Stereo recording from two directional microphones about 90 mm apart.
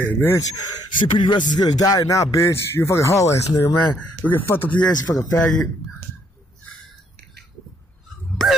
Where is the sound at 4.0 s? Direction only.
20° left (ahead or behind).